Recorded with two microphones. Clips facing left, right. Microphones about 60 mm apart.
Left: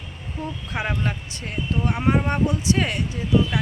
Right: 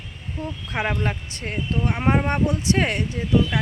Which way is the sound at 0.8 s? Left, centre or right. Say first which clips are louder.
Right 2 dB; right.